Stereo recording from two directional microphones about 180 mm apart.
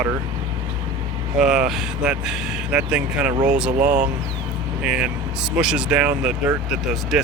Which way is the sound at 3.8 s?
45° right (ahead or behind).